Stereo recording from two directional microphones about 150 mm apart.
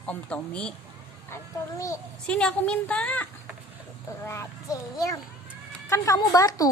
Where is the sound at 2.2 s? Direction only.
5° left (ahead or behind).